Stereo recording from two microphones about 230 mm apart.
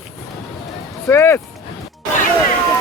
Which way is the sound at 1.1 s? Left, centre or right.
Centre.